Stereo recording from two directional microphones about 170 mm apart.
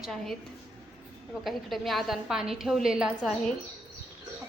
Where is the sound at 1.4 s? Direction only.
Centre (ahead or behind).